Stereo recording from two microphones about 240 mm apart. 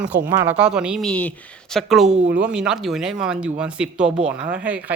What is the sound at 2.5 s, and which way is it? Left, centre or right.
Speech, centre.